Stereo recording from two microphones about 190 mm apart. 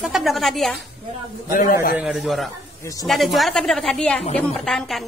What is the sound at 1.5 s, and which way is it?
Speech, 45° left (ahead or behind).